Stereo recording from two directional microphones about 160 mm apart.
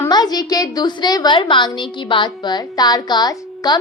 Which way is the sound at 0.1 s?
25° left (ahead or behind).